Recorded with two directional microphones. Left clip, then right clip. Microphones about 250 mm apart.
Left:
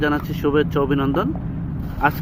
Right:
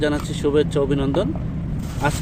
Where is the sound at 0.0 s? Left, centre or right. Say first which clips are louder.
Left 1 dB; centre.